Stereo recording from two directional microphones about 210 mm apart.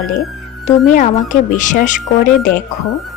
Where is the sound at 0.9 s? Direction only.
35° left (ahead or behind).